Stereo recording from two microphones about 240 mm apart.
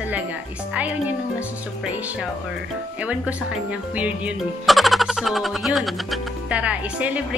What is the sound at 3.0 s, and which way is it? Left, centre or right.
Speech, centre.